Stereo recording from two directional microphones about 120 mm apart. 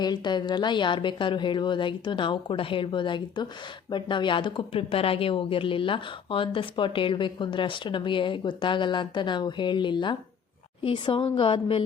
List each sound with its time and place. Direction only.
0.0 s a woman's voice: 35° left (ahead or behind)